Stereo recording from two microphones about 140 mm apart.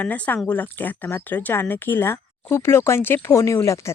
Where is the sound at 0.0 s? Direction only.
10° left (ahead or behind).